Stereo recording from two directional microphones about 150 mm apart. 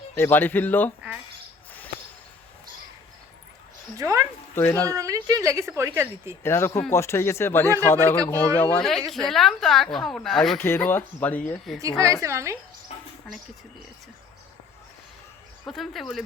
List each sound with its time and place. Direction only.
0.1 s speech: 15° left (ahead or behind)
3.9 s a woman's voice: 20° right (ahead or behind)
4.5 s speech: 15° left (ahead or behind)
4.9 s a woman's voice: 20° right (ahead or behind)
6.4 s speech: 15° left (ahead or behind)
8.8 s speech: centre (ahead or behind)
10.6 s speech: 15° left (ahead or behind)
11.8 s a woman's voice: 20° right (ahead or behind)
15.6 s speech: centre (ahead or behind)